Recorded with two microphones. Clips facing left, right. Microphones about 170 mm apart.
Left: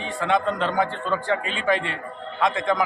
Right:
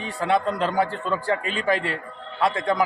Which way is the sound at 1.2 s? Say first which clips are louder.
Even; 40° right (ahead or behind).